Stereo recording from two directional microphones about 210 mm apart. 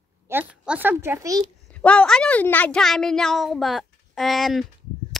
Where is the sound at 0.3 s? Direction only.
10° right (ahead or behind).